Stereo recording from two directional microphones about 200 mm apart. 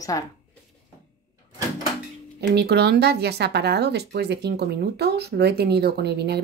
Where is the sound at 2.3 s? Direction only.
55° right (ahead or behind).